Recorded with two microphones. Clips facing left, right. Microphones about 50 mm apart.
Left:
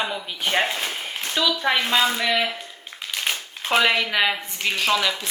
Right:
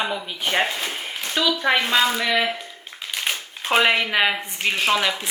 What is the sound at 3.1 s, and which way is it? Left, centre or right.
Crumpling, centre.